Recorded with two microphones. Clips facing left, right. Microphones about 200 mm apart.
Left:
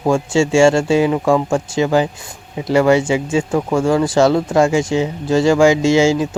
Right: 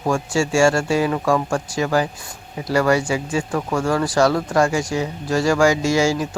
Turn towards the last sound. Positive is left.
turn(degrees=25)  # may be behind; listen again after turning